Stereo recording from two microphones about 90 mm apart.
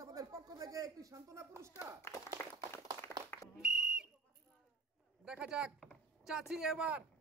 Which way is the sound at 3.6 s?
10° right (ahead or behind).